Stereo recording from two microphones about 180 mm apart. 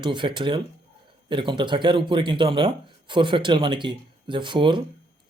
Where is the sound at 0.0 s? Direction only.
25° right (ahead or behind).